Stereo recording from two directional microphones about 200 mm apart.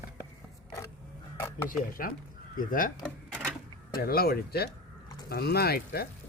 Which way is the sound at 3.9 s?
50° left (ahead or behind).